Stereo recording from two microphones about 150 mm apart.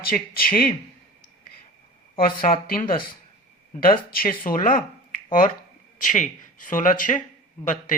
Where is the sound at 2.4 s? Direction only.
65° left (ahead or behind).